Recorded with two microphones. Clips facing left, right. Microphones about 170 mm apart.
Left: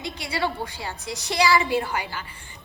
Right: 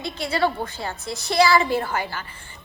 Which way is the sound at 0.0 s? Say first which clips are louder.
Right 5 dB; 15° left (ahead or behind).